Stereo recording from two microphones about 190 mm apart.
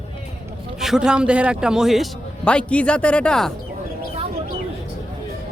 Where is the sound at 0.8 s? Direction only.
5° right (ahead or behind).